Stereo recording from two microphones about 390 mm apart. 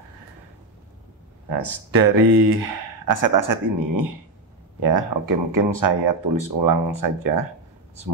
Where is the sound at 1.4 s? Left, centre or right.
Right.